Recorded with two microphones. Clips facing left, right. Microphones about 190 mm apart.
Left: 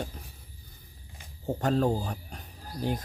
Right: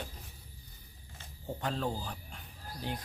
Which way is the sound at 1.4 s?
45° left (ahead or behind).